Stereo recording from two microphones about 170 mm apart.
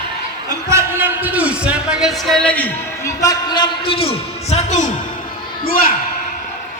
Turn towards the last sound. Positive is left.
turn(degrees=60)  # may be behind; listen again after turning